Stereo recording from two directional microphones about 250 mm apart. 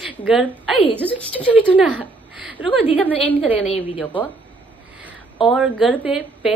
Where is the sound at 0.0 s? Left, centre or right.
Centre.